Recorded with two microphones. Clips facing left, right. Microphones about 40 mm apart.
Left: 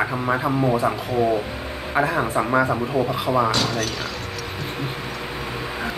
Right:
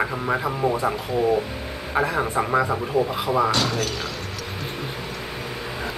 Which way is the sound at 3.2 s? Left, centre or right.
Left.